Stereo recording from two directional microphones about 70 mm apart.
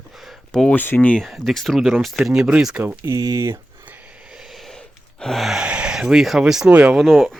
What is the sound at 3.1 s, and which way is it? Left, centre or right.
Speech, right.